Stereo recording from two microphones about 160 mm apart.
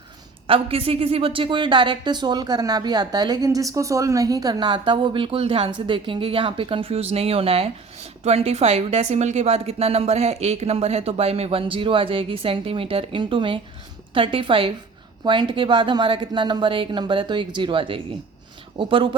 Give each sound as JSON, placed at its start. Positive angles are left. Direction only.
{"t": 0.4, "sound": "a woman's voice", "side_deg": -35}